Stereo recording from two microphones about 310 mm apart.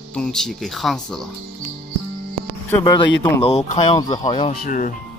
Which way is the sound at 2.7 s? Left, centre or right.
Centre.